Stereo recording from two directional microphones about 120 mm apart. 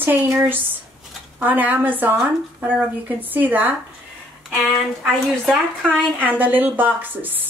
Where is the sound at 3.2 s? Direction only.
15° right (ahead or behind).